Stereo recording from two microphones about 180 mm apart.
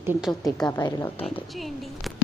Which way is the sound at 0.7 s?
15° left (ahead or behind).